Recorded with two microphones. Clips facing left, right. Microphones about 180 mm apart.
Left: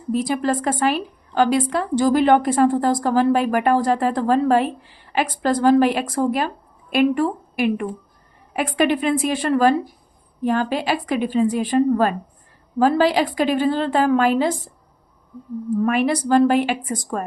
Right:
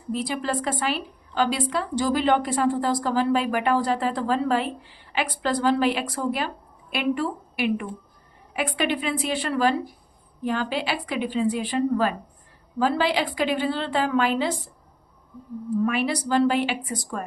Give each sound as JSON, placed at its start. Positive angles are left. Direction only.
{"t": 0.1, "sound": "a woman's voice", "side_deg": 45}
{"t": 15.9, "sound": "a woman's voice", "side_deg": 50}